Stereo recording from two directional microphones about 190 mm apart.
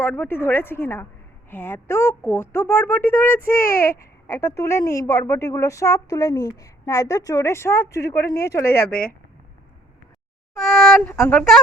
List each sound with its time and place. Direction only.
0.0 s speech: 10° left (ahead or behind)
8.9 s speech: 50° left (ahead or behind)
10.6 s speech: centre (ahead or behind)